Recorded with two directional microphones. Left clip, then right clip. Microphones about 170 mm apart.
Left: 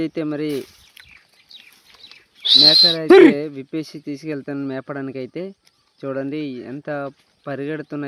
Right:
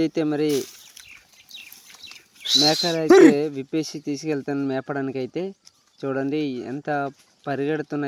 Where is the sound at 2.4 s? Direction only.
20° left (ahead or behind).